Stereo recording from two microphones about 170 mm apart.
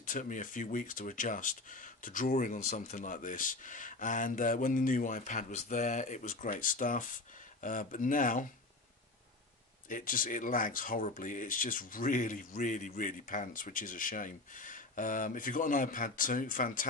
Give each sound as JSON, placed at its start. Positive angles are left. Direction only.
{"t": 0.0, "sound": "speech", "side_deg": 50}
{"t": 9.8, "sound": "speech", "side_deg": 50}